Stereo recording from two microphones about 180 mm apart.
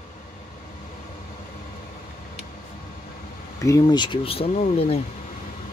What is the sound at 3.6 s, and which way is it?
Speech, 20° left (ahead or behind).